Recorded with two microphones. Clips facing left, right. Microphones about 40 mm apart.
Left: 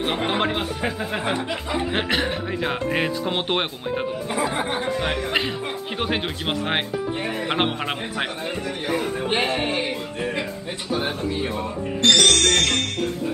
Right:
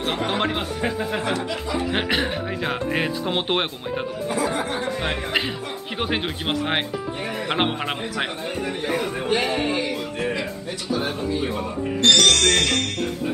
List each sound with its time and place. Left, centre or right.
0.3 s speech: centre
1.2 s a man's voice: left
1.9 s speech: centre
4.3 s a man's voice: left
5.0 s speech: centre
9.3 s a man's voice: left
11.5 s speech: centre